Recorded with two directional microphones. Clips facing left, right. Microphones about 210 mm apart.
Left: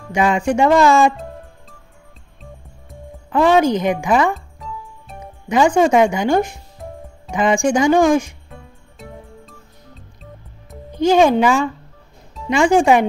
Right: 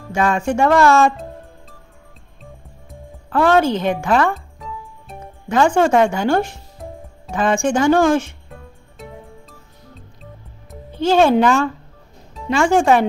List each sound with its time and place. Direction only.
0.1 s speech: 15° left (ahead or behind)
2.9 s speech: 10° left (ahead or behind)
4.3 s music: centre (ahead or behind)
5.2 s speech: 15° left (ahead or behind)
8.5 s music: centre (ahead or behind)
10.9 s speech: 15° left (ahead or behind)